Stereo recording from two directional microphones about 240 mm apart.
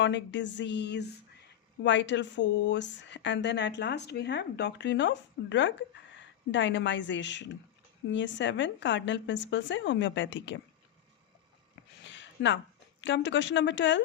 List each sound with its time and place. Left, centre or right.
0.0 s a woman's voice: left
12.0 s a sound: left
13.0 s a woman's voice: left